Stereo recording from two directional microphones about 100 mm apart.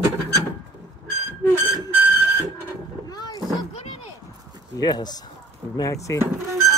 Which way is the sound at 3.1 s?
40° left (ahead or behind).